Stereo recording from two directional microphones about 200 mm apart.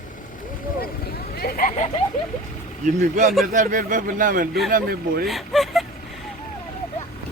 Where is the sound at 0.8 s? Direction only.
50° left (ahead or behind).